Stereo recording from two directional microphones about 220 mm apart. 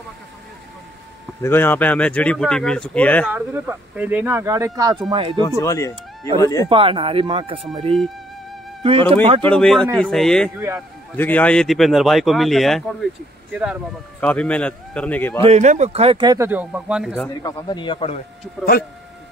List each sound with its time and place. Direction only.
1.4 s speech: 10° left (ahead or behind)
3.3 s speech: 10° right (ahead or behind)
5.6 s a man's voice: 15° left (ahead or behind)
6.7 s speech: 25° right (ahead or behind)
9.1 s speech: 25° right (ahead or behind)
9.4 s speech: 5° left (ahead or behind)
14.2 s a man's voice: 5° left (ahead or behind)
15.4 s speech: 30° right (ahead or behind); by 17.3 s 5° right (ahead or behind)
17.4 s speech: 20° left (ahead or behind)